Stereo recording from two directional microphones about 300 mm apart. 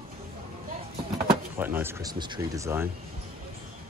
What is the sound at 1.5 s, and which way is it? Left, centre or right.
Speech, centre.